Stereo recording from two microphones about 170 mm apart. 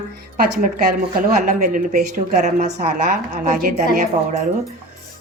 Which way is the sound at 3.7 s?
45° right (ahead or behind).